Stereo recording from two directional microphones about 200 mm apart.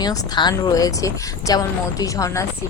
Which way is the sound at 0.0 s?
20° left (ahead or behind).